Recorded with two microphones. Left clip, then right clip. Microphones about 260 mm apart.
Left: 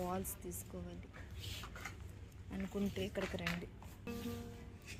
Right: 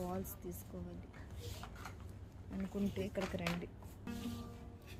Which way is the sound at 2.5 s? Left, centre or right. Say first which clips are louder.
Even; centre.